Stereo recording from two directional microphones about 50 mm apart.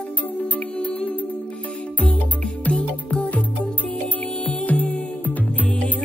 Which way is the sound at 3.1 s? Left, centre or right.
Left.